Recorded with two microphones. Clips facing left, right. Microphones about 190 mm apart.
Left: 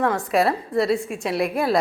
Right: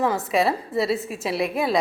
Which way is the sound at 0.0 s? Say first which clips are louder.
Left 1 dB; centre (ahead or behind).